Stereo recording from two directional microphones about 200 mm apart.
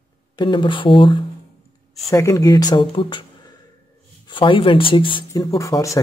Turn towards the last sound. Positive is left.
turn(degrees=15)  # may be behind; listen again after turning